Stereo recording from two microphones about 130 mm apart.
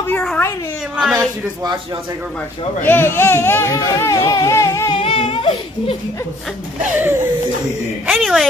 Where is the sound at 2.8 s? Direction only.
15° left (ahead or behind).